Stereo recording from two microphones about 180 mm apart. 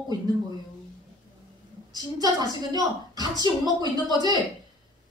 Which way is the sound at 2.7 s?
20° right (ahead or behind).